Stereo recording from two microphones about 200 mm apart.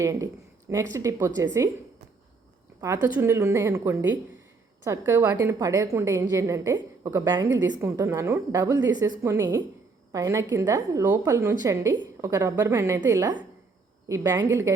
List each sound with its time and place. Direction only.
0.0 s a woman's voice: 15° right (ahead or behind)
2.8 s a woman's voice: 15° right (ahead or behind)